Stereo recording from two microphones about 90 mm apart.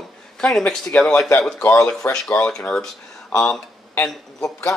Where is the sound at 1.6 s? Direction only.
30° left (ahead or behind).